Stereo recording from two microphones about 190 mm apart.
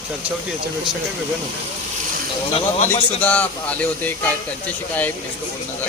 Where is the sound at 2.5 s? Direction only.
30° left (ahead or behind).